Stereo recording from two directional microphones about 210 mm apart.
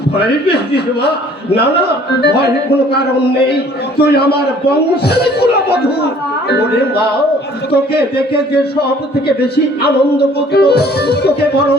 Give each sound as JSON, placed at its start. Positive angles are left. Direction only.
{"t": 2.2, "sound": "music", "side_deg": 50}
{"t": 3.9, "sound": "music", "side_deg": 50}
{"t": 5.0, "sound": "speech", "side_deg": 50}
{"t": 9.2, "sound": "music", "side_deg": 50}